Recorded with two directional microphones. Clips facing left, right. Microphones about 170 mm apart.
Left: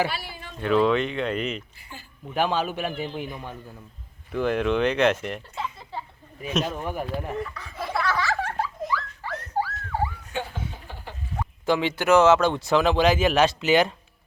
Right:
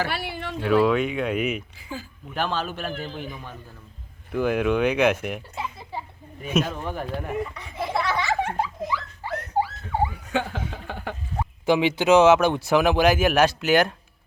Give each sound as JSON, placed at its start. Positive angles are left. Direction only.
{"t": 0.1, "sound": "a sound", "side_deg": -65}
{"t": 0.6, "sound": "speech", "side_deg": -5}
{"t": 2.3, "sound": "a man's voice", "side_deg": 10}
{"t": 4.3, "sound": "speech", "side_deg": -5}
{"t": 5.2, "sound": "a sound", "side_deg": -10}
{"t": 6.4, "sound": "speech", "side_deg": 0}
{"t": 7.3, "sound": "laughter", "side_deg": -20}
{"t": 10.3, "sound": "a sound", "side_deg": -90}
{"t": 11.6, "sound": "speech", "side_deg": -15}